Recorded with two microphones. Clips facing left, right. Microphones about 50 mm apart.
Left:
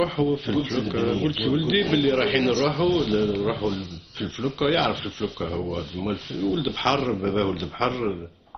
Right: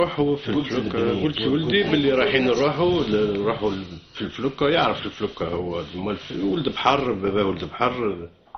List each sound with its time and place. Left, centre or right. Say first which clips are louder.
0.0 s a man's voice: right 2 dB; centre